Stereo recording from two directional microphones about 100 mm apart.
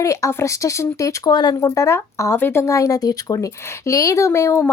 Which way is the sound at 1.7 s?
30° left (ahead or behind).